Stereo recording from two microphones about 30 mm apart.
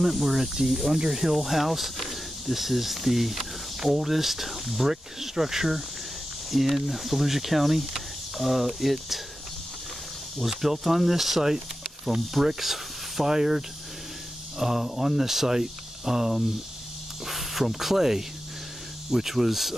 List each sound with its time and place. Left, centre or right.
0.0 s speech: centre
0.7 s speech: centre
0.9 s speech: centre
1.2 s speech: centre
10.4 s speech: centre
12.1 s speech: centre
12.4 s speech: centre